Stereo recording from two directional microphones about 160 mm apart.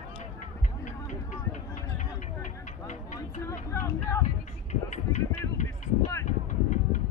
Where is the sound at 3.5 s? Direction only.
15° left (ahead or behind).